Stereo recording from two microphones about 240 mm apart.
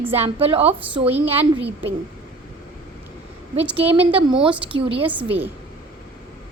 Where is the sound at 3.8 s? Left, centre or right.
Right.